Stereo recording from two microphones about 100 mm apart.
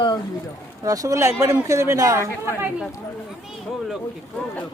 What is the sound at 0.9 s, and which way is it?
Speech, 35° right (ahead or behind).